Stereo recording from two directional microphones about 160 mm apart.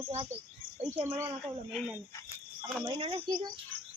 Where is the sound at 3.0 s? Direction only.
35° right (ahead or behind).